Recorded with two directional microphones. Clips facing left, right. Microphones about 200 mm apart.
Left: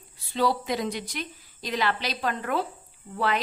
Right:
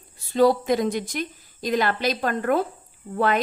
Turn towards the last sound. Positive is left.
turn(degrees=-50)  # may be behind; listen again after turning